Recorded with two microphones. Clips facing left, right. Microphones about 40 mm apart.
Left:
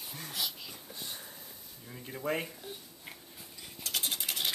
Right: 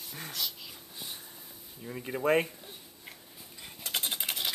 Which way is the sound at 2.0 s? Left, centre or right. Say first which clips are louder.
Right 8 dB; right.